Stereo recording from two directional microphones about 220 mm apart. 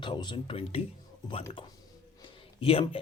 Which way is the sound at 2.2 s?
25° left (ahead or behind).